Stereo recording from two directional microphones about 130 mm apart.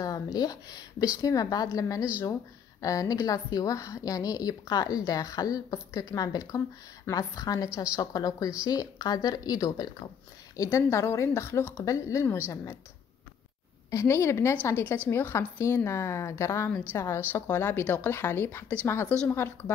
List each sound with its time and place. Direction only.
0.0 s a woman's voice: 30° left (ahead or behind)
13.8 s a woman's voice: 25° left (ahead or behind)